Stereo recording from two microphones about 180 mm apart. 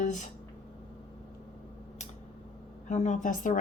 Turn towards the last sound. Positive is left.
turn(degrees=45)  # may be behind; listen again after turning